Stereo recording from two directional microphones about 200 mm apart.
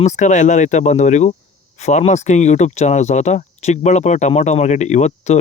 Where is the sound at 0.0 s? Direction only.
35° left (ahead or behind).